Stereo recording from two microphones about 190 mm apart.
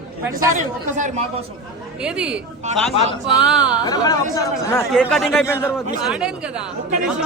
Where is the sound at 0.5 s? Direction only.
40° right (ahead or behind).